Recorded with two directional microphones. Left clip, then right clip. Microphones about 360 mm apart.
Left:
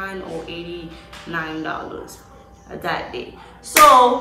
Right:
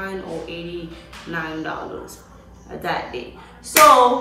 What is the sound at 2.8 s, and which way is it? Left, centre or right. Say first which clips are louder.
Speech: even; centre.